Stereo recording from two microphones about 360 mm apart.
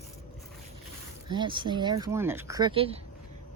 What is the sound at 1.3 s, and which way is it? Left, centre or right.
Speech, centre.